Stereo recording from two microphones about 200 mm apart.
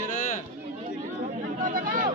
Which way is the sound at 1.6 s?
40° right (ahead or behind).